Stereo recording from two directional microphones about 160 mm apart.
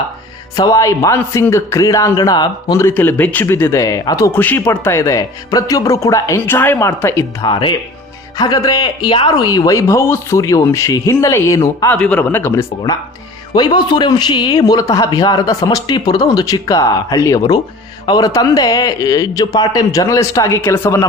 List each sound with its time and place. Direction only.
0.5 s speech: 20° left (ahead or behind)
7.4 s speech: 30° left (ahead or behind)
11.9 s speech: 5° left (ahead or behind)